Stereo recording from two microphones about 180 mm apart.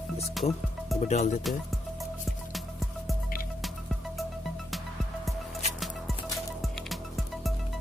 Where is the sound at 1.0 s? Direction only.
40° left (ahead or behind).